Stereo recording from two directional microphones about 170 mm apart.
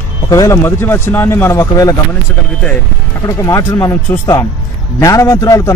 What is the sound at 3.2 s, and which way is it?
Speech, 20° left (ahead or behind).